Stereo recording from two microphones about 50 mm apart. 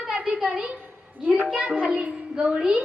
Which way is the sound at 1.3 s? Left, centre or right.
Centre.